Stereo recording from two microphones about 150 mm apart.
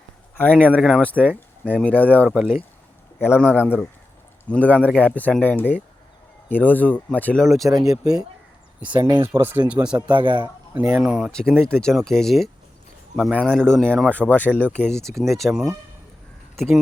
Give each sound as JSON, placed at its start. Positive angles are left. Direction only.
{"t": 0.3, "sound": "speech", "side_deg": 10}
{"t": 2.2, "sound": "speech", "side_deg": -5}
{"t": 3.2, "sound": "speech", "side_deg": 15}
{"t": 4.8, "sound": "speech", "side_deg": -10}
{"t": 5.0, "sound": "speech", "side_deg": 10}
{"t": 7.7, "sound": "speech", "side_deg": -25}
{"t": 9.2, "sound": "speech", "side_deg": -15}
{"t": 10.1, "sound": "a man's voice", "side_deg": -35}
{"t": 10.8, "sound": "speech", "side_deg": -10}
{"t": 11.3, "sound": "speech", "side_deg": 5}